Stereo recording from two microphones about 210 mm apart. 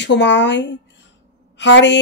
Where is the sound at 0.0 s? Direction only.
55° left (ahead or behind).